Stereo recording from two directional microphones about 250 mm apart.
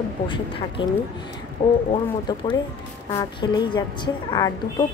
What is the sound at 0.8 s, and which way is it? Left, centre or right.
A woman's voice, centre.